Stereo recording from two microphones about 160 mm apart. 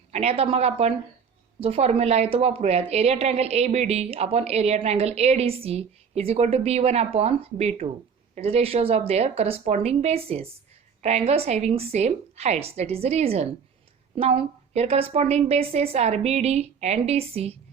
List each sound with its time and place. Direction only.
0.1 s a woman's voice: 40° right (ahead or behind)